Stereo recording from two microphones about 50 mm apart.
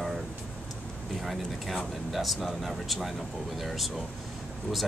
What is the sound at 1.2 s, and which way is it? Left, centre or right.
Speech, centre.